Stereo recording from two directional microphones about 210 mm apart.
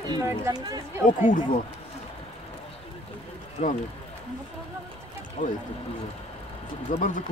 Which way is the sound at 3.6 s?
30° left (ahead or behind).